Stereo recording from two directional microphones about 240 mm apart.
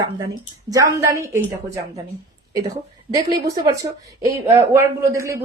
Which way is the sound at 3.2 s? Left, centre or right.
Centre.